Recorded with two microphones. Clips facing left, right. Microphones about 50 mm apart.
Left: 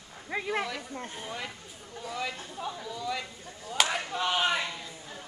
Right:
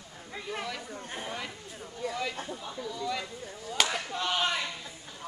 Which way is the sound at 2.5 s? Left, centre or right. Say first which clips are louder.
Left 1 dB; centre.